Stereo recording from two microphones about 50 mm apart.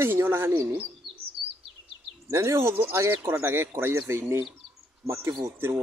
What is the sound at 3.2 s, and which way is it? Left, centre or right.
Speech, right.